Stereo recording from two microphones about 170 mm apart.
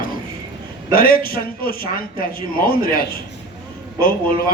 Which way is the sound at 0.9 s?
60° left (ahead or behind).